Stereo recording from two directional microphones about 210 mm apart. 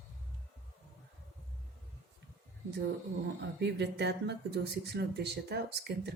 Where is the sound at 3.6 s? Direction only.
55° right (ahead or behind).